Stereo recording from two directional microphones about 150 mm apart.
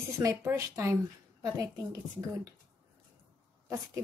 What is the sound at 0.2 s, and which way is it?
Speech, 20° right (ahead or behind).